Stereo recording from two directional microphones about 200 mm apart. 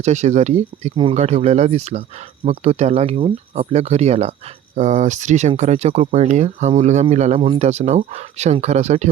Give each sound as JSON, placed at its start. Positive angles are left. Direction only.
{"t": 0.0, "sound": "speech", "side_deg": -35}